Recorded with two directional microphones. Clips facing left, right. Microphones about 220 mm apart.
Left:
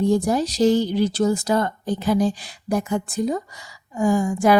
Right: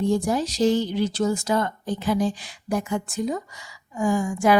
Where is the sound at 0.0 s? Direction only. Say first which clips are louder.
Left 3 dB; 40° left (ahead or behind).